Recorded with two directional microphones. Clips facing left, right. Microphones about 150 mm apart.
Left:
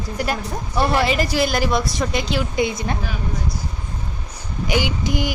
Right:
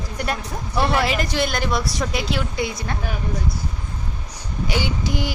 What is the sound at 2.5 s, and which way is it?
Speech, 20° left (ahead or behind).